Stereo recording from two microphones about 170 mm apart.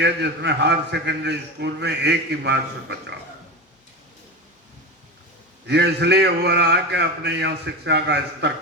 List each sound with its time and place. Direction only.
0.0 s a man's voice: 90° right
5.6 s a man's voice: 80° right